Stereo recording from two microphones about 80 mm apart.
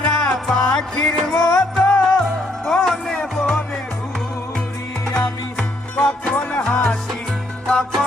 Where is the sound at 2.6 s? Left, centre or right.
Centre.